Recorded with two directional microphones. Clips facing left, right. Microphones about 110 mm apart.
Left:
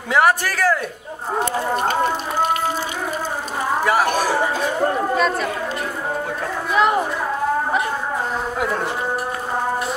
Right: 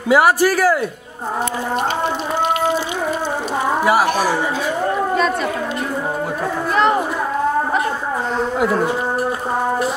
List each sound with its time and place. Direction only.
0.1 s speech: 5° right (ahead or behind)
3.8 s speech: 10° right (ahead or behind)
5.1 s speech: centre (ahead or behind)
8.5 s speech: centre (ahead or behind)